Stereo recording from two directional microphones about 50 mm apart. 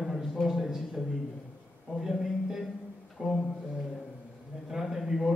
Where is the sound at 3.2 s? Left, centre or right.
Right.